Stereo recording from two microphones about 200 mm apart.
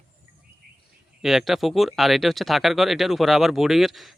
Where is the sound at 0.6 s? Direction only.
50° right (ahead or behind).